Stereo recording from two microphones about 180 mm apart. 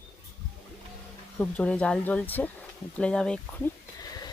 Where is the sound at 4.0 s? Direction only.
20° left (ahead or behind).